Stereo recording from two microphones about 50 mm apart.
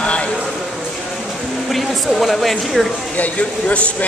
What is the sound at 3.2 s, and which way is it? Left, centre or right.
Speech, left.